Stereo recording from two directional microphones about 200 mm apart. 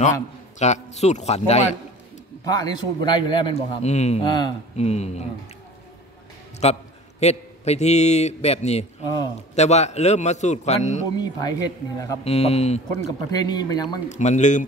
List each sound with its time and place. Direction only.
0.6 s a man's voice: 35° left (ahead or behind)
2.4 s a man's voice: 20° left (ahead or behind)
6.6 s a man's voice: 35° left (ahead or behind)
11.1 s a man's voice: 20° left (ahead or behind)
12.3 s a man's voice: 30° left (ahead or behind)
12.9 s a man's voice: 20° left (ahead or behind)
14.0 s a man's voice: 35° left (ahead or behind)